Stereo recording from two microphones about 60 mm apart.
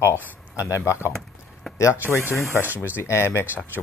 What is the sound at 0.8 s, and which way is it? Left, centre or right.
Speech, left.